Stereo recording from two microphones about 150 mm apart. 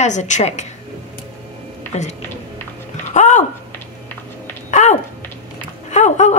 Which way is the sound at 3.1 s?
50° left (ahead or behind).